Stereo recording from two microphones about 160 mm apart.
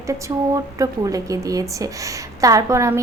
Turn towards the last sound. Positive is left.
turn(degrees=-20)  # may be behind; listen again after turning